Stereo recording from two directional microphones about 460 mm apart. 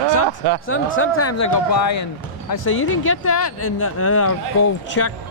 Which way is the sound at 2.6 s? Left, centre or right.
Left.